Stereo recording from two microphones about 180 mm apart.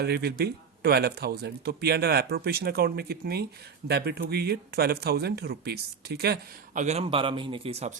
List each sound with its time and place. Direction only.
0.0 s speech: 65° right (ahead or behind)
6.8 s a man's voice: 35° right (ahead or behind)